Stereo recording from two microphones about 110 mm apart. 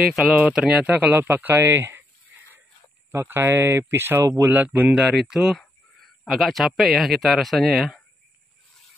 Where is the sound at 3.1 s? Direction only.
20° right (ahead or behind); by 8.0 s centre (ahead or behind).